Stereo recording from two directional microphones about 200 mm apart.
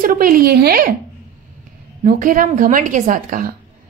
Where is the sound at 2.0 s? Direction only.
40° right (ahead or behind).